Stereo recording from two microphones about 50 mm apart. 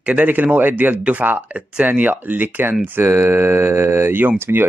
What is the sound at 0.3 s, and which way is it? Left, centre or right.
Speech, right.